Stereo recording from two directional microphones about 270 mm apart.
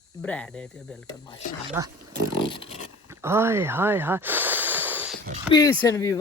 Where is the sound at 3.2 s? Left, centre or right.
Centre.